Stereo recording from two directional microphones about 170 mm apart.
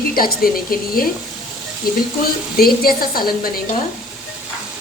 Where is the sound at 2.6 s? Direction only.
60° left (ahead or behind).